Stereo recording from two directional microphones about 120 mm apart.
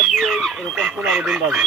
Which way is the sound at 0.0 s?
Centre (ahead or behind).